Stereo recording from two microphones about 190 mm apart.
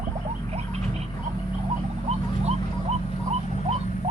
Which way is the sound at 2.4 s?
35° right (ahead or behind).